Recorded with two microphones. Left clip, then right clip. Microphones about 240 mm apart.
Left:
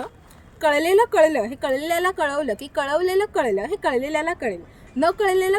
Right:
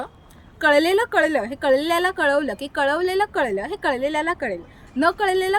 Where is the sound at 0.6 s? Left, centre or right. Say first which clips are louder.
Even; centre.